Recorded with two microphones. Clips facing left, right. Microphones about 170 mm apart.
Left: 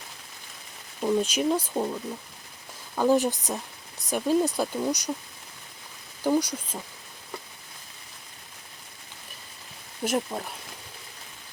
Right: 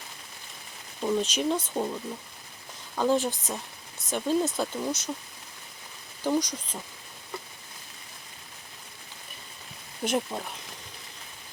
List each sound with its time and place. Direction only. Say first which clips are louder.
1.0 s speech: left 2 dB; 10° left (ahead or behind)
6.2 s speech: left 3 dB; 10° left (ahead or behind)
10.0 s speech: left 1 dB; 5° left (ahead or behind)